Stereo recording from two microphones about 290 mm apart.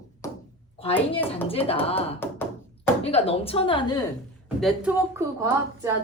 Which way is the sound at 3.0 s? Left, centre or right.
Centre.